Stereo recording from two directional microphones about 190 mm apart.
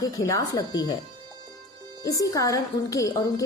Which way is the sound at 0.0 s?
20° left (ahead or behind).